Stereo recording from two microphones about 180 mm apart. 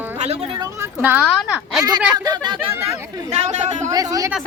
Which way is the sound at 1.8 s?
20° right (ahead or behind).